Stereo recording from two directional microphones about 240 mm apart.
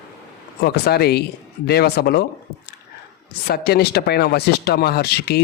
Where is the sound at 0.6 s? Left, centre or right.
Left.